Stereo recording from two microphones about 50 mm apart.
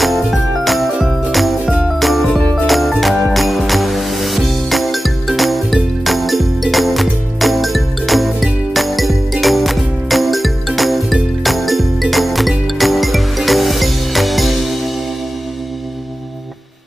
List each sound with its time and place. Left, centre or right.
0.0 s music: centre